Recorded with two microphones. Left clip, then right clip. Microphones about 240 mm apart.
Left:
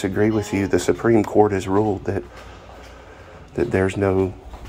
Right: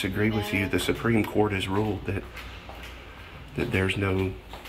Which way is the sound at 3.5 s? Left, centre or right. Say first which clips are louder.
Left 7 dB; centre.